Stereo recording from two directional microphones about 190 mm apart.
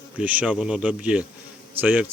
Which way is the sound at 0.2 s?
5° right (ahead or behind).